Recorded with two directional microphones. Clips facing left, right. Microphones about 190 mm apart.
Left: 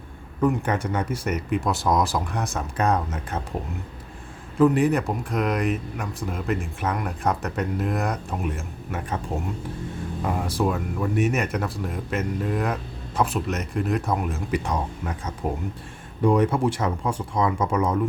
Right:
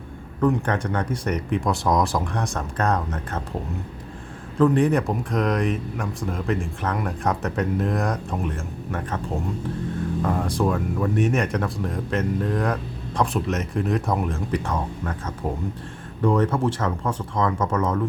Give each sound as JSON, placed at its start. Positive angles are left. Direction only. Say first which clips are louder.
{"t": 0.4, "sound": "speech", "louder": "right 1 dB", "side_deg": 5}
{"t": 4.5, "sound": "speech", "louder": "even", "side_deg": 5}
{"t": 10.2, "sound": "speech", "louder": "even", "side_deg": 5}